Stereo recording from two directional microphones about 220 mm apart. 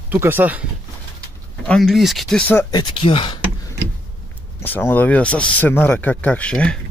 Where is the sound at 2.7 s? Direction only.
20° left (ahead or behind).